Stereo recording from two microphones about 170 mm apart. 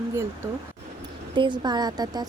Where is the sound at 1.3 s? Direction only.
30° right (ahead or behind).